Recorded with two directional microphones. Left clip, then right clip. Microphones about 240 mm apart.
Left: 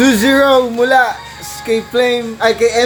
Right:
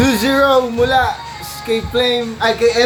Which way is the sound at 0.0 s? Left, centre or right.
Left.